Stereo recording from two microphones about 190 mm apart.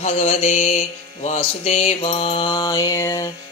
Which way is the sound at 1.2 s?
35° left (ahead or behind).